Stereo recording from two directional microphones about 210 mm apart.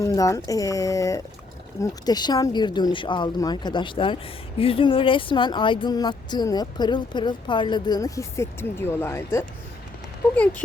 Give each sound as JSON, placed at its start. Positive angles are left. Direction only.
{"t": 0.0, "sound": "speech", "side_deg": 15}